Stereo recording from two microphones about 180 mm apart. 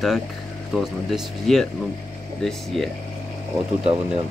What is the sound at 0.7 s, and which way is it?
Speech, centre (ahead or behind).